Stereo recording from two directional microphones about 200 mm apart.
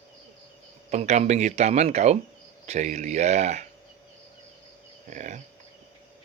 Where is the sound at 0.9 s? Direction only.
35° right (ahead or behind).